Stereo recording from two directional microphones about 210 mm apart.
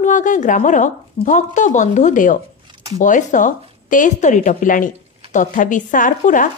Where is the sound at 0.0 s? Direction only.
35° left (ahead or behind).